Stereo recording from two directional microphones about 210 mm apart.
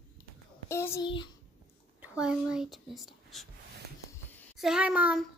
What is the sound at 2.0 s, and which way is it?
A child's voice, 5° right (ahead or behind).